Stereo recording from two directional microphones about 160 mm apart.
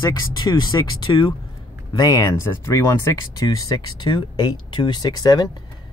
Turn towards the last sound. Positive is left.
turn(degrees=25)  # may be behind; listen again after turning